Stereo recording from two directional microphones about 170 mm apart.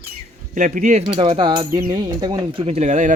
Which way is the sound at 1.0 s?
30° right (ahead or behind).